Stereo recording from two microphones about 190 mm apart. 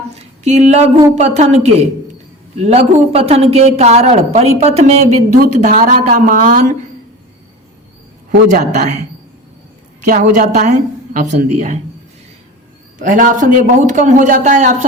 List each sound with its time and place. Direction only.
0.2 s a woman's voice: 35° right (ahead or behind)
8.4 s speech: 45° right (ahead or behind)
10.0 s speech: 40° right (ahead or behind)
13.0 s speech: 45° right (ahead or behind)